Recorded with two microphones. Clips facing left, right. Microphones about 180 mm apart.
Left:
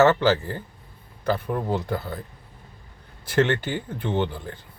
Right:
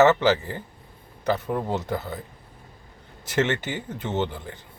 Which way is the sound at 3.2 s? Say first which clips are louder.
Left 2 dB; 20° right (ahead or behind).